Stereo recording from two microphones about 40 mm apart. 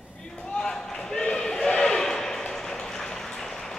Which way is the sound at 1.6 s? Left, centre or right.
Centre.